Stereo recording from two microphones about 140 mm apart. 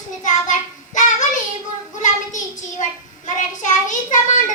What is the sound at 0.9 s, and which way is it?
Child singing, 60° left (ahead or behind).